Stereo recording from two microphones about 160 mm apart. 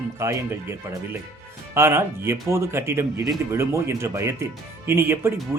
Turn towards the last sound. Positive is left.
turn(degrees=-15)  # may be behind; listen again after turning